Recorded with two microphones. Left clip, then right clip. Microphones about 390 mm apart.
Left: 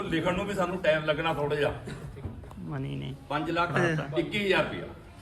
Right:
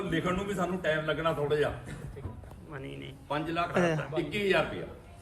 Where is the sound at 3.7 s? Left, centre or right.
Centre.